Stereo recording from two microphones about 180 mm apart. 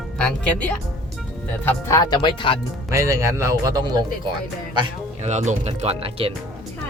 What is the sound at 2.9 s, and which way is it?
Speech, 15° right (ahead or behind).